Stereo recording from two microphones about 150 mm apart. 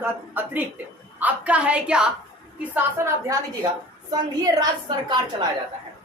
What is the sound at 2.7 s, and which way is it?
Speech, 20° right (ahead or behind).